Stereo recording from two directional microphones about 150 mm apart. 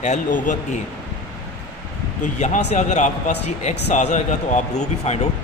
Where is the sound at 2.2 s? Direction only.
55° left (ahead or behind).